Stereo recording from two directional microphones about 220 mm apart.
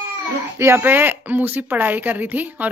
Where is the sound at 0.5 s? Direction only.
10° right (ahead or behind).